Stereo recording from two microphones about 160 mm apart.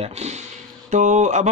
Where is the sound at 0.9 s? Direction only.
50° right (ahead or behind).